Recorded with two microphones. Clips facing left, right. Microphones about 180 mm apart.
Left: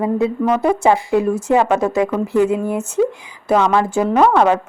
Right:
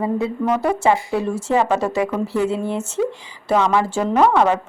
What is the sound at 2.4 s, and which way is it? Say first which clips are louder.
Speech: left 6 dB; 15° left (ahead or behind).